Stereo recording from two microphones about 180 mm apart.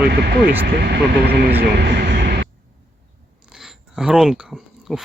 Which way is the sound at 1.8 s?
65° right (ahead or behind).